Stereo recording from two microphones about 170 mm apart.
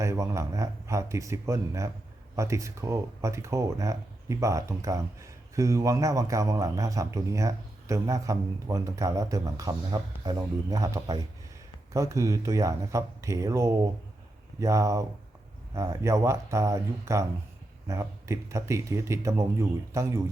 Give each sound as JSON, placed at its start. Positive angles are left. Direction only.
{"t": 0.0, "sound": "speech", "side_deg": -15}